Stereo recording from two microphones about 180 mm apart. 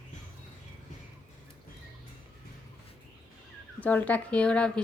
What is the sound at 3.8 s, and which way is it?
A woman's voice, 10° left (ahead or behind).